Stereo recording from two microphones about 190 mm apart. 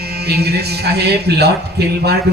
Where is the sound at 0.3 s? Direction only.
60° right (ahead or behind).